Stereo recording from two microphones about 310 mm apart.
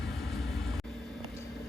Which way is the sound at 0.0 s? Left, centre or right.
Centre.